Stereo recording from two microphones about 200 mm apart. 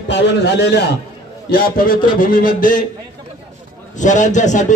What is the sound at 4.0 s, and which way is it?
Speech, 40° left (ahead or behind).